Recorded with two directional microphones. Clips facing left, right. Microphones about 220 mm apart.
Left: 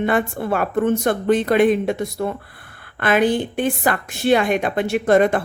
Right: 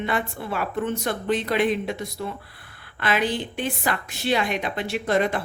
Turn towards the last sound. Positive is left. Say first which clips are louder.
# left 7 dB
turn(degrees=50)  # may be behind; listen again after turning